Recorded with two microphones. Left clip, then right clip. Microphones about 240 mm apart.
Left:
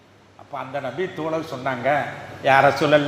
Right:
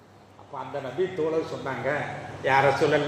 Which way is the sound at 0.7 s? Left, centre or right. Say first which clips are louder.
Left 6 dB; left.